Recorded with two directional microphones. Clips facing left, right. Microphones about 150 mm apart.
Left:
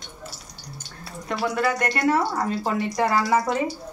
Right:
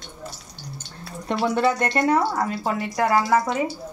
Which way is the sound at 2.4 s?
Centre (ahead or behind).